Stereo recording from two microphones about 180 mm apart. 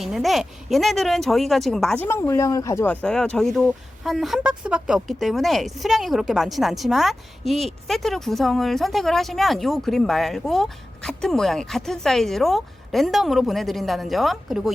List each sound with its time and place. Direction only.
0.0 s speech: centre (ahead or behind)
2.0 s speech: 15° left (ahead or behind); by 14.7 s centre (ahead or behind)